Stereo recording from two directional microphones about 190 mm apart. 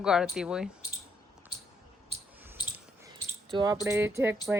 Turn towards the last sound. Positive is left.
turn(degrees=-15)  # may be behind; listen again after turning